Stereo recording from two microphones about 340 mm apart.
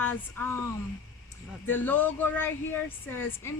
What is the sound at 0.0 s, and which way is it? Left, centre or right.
Speech, centre.